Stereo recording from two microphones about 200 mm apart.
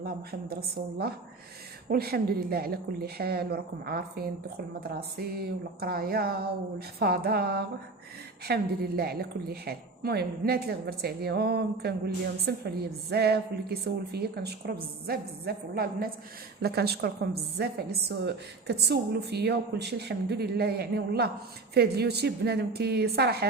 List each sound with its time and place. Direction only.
0.0 s a woman's voice: 50° right (ahead or behind)